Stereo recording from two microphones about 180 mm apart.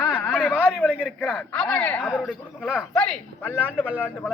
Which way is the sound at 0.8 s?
5° left (ahead or behind).